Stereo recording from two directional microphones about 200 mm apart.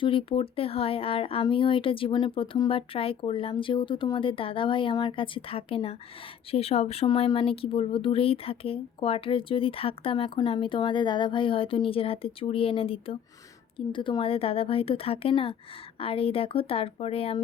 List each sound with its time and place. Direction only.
0.0 s speech: 25° left (ahead or behind)